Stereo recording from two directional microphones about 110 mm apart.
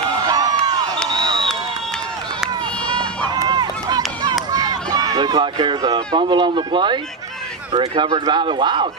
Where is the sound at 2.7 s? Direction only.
10° left (ahead or behind).